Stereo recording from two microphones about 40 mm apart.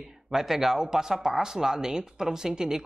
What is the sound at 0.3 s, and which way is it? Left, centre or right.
Speech, centre.